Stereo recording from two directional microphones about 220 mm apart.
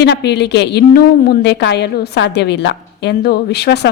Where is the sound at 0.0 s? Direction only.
50° left (ahead or behind).